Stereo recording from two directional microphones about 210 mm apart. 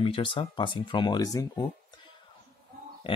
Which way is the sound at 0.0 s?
25° left (ahead or behind).